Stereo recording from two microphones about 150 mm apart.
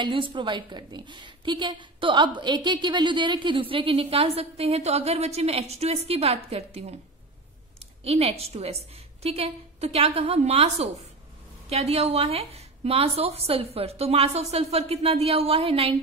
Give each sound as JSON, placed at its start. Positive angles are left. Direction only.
{"t": 0.0, "sound": "a woman's voice", "side_deg": -35}
{"t": 8.0, "sound": "a woman's voice", "side_deg": -40}